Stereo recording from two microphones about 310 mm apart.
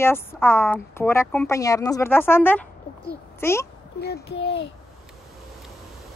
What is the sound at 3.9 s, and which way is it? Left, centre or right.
Speech, left.